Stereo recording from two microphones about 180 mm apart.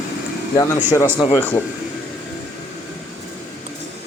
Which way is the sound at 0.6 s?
15° left (ahead or behind).